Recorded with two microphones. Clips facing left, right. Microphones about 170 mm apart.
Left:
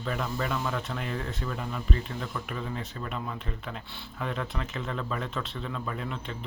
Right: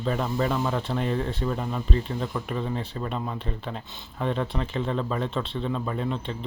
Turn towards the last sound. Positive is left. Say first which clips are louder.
# right 6 dB
turn(degrees=-30)  # may be behind; listen again after turning